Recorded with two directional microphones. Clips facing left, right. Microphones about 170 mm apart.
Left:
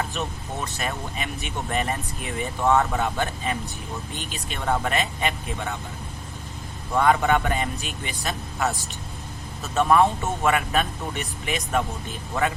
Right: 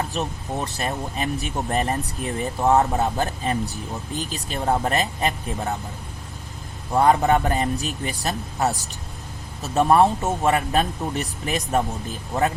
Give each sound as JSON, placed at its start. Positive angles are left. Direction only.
{"t": 0.1, "sound": "speech", "side_deg": -35}
{"t": 6.9, "sound": "speech", "side_deg": -35}